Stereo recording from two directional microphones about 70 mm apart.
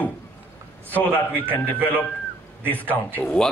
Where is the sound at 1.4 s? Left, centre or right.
Right.